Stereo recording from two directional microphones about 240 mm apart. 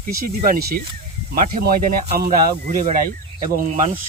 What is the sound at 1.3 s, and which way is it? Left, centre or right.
Speech, right.